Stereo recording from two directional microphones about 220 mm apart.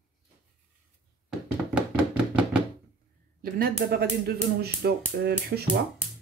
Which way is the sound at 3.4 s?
45° right (ahead or behind).